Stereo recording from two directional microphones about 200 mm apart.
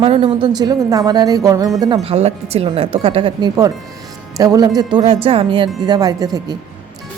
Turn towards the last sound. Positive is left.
turn(degrees=-20)  # may be behind; listen again after turning